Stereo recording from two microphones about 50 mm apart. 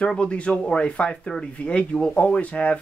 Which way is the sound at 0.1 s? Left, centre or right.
Left.